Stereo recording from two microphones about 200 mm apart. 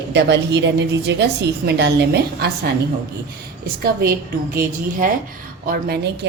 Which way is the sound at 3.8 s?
50° right (ahead or behind).